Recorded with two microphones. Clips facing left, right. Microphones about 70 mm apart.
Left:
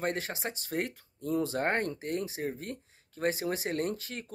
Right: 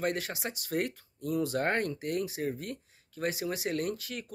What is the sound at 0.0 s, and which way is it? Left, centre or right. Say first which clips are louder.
Speech: right 1 dB; left.